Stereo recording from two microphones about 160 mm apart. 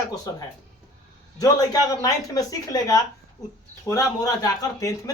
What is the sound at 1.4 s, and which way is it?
Speech, 25° left (ahead or behind).